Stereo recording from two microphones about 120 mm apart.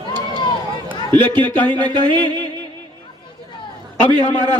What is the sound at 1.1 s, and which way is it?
Speech, 40° right (ahead or behind).